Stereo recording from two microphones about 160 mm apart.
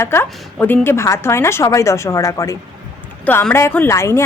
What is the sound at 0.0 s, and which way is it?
A woman's voice, 15° left (ahead or behind).